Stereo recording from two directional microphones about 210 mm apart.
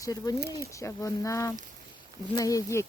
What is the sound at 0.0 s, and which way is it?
Speech, 15° left (ahead or behind).